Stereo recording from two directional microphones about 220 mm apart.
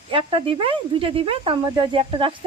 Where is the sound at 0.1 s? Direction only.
25° right (ahead or behind).